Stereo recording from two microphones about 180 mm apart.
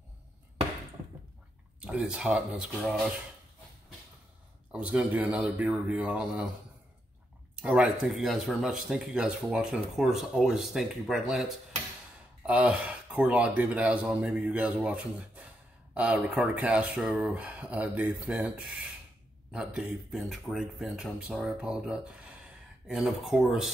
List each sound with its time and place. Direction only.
1.8 s speech: 5° right (ahead or behind)
4.7 s speech: 5° right (ahead or behind)
7.5 s speech: 5° right (ahead or behind)